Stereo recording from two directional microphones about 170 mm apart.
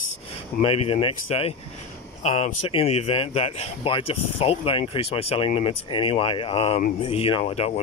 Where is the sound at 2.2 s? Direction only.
45° left (ahead or behind).